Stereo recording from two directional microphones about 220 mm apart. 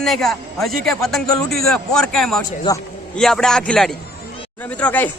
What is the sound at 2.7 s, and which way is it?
Speech, 20° left (ahead or behind).